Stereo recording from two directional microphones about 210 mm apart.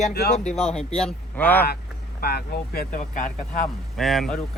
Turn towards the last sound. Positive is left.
turn(degrees=0)  # may be behind; listen again after turning